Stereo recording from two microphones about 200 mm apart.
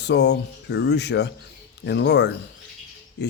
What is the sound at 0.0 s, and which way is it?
Speech, 60° left (ahead or behind).